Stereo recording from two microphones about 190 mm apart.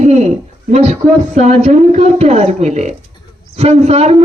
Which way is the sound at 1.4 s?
35° right (ahead or behind).